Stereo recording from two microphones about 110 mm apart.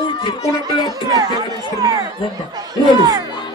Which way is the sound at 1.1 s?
35° right (ahead or behind).